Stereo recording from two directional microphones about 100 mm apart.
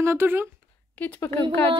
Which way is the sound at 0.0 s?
25° right (ahead or behind).